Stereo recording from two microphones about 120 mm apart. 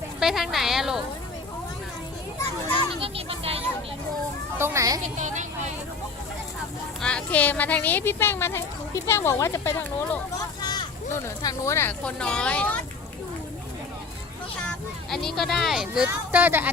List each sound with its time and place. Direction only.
0.2 s speech: centre (ahead or behind)
3.0 s children playing: 55° right (ahead or behind)
4.5 s speech: 20° right (ahead or behind)
5.0 s a woman's voice: 85° right
7.0 s speech: 10° left (ahead or behind)
10.6 s vehicle: 35° left (ahead or behind)
11.4 s speech: 25° left (ahead or behind)
12.0 s speech: 10° left (ahead or behind)
15.1 s speech: 5° left (ahead or behind)
16.0 s speech: 15° right (ahead or behind)